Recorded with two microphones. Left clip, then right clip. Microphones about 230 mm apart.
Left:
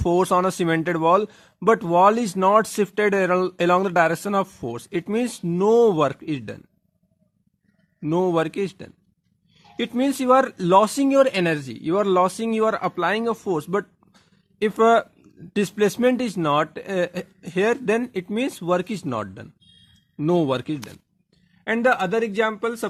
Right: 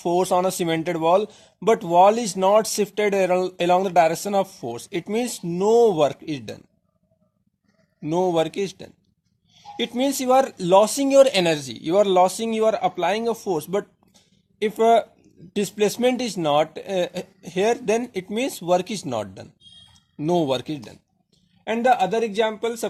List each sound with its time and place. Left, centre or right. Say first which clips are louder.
0.0 s speech: left 1 dB; left
8.0 s a man's voice: even; left